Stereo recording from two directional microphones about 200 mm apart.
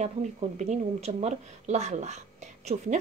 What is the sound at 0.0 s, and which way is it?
Speech, 35° right (ahead or behind).